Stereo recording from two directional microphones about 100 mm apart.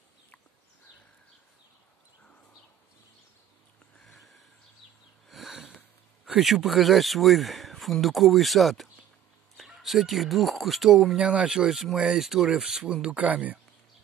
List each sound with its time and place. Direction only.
4.0 s a sound: centre (ahead or behind)
5.3 s sniff: 5° right (ahead or behind)
6.2 s speech: centre (ahead or behind)